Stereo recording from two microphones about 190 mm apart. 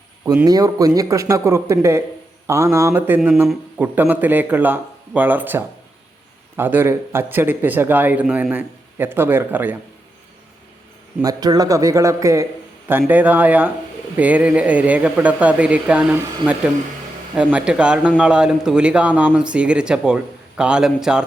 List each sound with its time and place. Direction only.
0.4 s speech: 20° right (ahead or behind)
11.2 s speech: 20° right (ahead or behind); by 21.2 s 5° right (ahead or behind)